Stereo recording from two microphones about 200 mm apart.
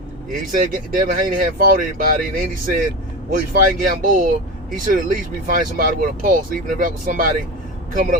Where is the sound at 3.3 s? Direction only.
45° right (ahead or behind).